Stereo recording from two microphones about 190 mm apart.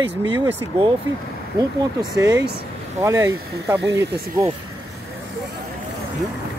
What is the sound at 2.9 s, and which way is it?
Speech, 15° right (ahead or behind).